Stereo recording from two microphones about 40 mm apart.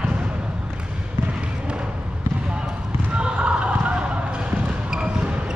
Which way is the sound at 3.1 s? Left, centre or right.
Right.